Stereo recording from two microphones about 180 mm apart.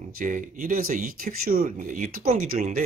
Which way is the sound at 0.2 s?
50° right (ahead or behind).